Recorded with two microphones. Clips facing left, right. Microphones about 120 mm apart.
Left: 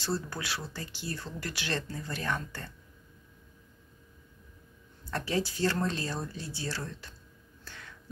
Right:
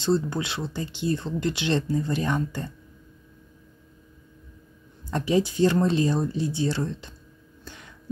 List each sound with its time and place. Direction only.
0.0 s speech: 20° right (ahead or behind)
5.1 s speech: 20° right (ahead or behind)
7.6 s a sound: 15° right (ahead or behind)